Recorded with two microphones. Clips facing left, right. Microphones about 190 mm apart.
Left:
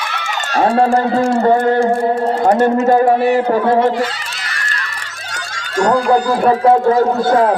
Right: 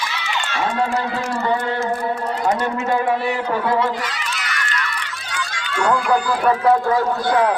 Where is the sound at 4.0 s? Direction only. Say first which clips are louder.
Left 7 dB; 30° left (ahead or behind).